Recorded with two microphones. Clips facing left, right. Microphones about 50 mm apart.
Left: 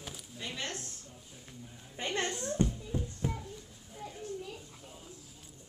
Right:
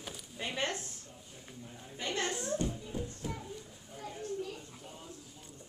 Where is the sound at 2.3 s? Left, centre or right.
Right.